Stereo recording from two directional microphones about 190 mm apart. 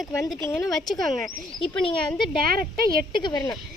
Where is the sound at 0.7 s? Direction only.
Centre (ahead or behind).